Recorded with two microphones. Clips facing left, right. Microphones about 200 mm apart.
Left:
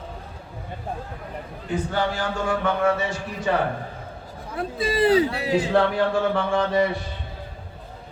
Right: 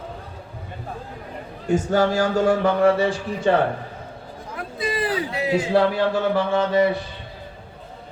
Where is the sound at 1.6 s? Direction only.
45° right (ahead or behind).